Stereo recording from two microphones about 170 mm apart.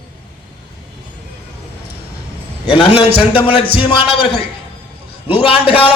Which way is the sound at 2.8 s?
35° left (ahead or behind).